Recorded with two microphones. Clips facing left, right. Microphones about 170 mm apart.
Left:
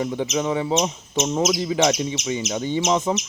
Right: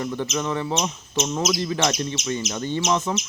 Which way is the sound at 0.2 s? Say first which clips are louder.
Left 3 dB; 15° left (ahead or behind).